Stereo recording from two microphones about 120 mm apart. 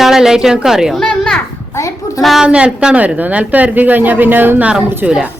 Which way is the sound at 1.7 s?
25° left (ahead or behind).